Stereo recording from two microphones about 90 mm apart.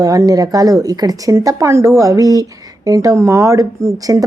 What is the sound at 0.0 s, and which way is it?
Speech, 40° right (ahead or behind).